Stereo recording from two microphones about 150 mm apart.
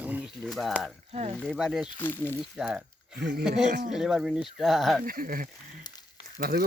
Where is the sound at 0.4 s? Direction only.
Centre (ahead or behind).